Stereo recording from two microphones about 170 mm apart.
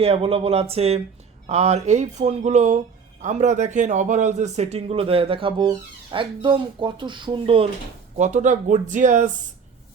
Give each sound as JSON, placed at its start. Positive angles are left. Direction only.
{"t": 0.0, "sound": "speech", "side_deg": -35}
{"t": 8.1, "sound": "speech", "side_deg": -45}